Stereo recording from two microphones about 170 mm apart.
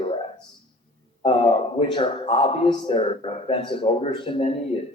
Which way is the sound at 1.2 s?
30° left (ahead or behind).